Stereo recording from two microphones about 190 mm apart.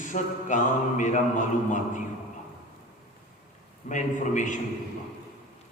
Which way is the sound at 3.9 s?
40° left (ahead or behind).